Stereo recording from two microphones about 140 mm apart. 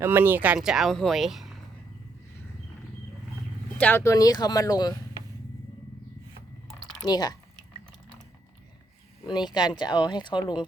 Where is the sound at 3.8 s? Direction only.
15° left (ahead or behind).